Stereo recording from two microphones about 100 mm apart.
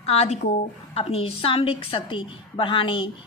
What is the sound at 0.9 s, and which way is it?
A woman's voice, 75° left (ahead or behind).